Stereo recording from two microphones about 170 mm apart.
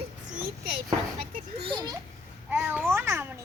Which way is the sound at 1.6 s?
30° right (ahead or behind).